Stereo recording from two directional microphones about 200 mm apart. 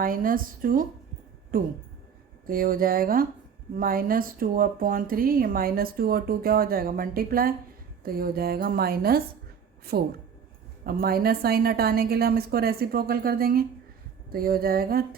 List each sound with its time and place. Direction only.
0.0 s speech: 45° right (ahead or behind)